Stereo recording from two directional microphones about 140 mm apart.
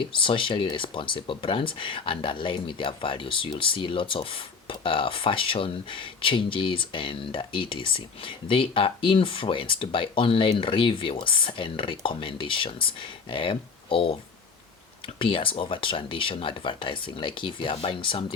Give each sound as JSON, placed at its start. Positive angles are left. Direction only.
{"t": 0.1, "sound": "speech", "side_deg": 35}